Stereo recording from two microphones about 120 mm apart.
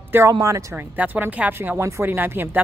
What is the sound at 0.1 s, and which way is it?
Speech, 20° right (ahead or behind).